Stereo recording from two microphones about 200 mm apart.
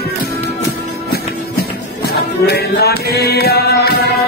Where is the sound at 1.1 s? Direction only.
50° left (ahead or behind).